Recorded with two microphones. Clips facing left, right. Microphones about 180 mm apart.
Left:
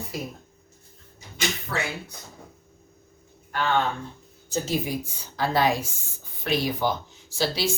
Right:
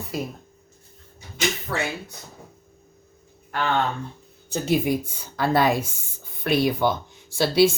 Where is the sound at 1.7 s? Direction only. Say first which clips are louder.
Even; 40° right (ahead or behind).